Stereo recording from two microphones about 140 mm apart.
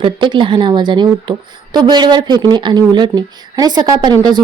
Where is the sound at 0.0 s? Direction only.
35° right (ahead or behind).